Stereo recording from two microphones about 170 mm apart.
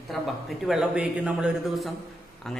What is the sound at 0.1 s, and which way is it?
Speech, centre (ahead or behind).